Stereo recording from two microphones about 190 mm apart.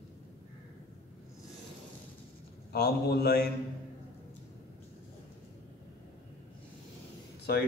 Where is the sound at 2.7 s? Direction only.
55° left (ahead or behind).